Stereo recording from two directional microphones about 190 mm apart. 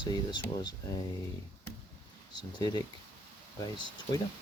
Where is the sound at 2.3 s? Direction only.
20° left (ahead or behind).